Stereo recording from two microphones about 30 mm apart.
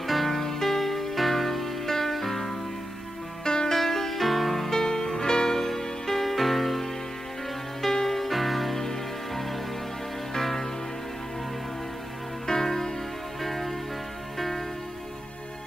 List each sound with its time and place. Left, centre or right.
0.0 s music: centre
3.4 s music: left
3.7 s music: centre
4.6 s music: centre
12.4 s music: centre